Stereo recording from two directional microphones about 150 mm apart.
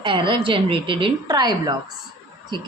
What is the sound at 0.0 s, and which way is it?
A woman's voice, 35° right (ahead or behind).